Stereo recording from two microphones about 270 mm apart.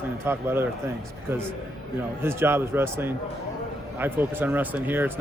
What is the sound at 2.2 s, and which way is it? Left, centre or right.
A man's voice, centre.